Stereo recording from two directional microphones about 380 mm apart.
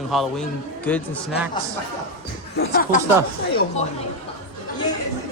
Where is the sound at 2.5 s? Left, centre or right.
Left.